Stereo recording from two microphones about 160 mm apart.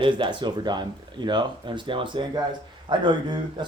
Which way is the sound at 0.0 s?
30° right (ahead or behind).